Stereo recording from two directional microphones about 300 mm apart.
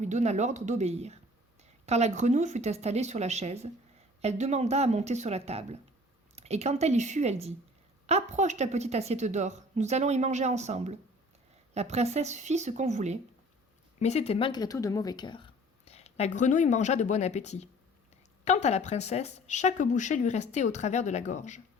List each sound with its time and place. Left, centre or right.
0.0 s a woman's voice: right
14.0 s speech: left